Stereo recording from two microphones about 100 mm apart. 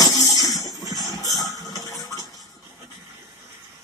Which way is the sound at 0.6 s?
40° right (ahead or behind).